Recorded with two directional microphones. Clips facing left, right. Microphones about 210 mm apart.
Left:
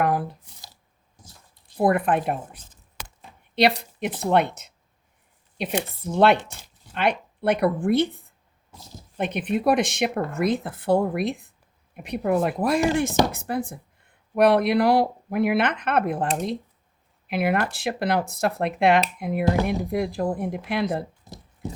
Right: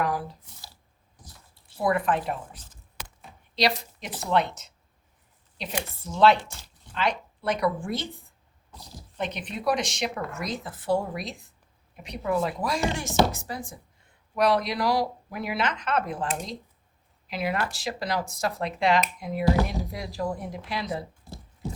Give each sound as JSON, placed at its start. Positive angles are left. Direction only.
{"t": 0.0, "sound": "speech", "side_deg": 60}
{"t": 1.8, "sound": "speech", "side_deg": 55}
{"t": 3.6, "sound": "speech", "side_deg": 55}
{"t": 6.0, "sound": "speech", "side_deg": 60}
{"t": 9.1, "sound": "speech", "side_deg": 55}